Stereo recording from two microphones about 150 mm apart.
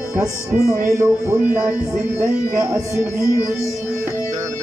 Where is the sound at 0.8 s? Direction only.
20° right (ahead or behind).